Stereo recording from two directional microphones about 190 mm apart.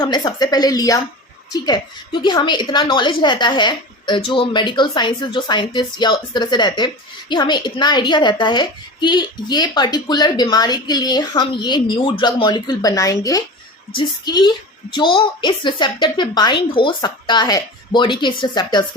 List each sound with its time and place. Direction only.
0.0 s a woman's voice: 20° left (ahead or behind)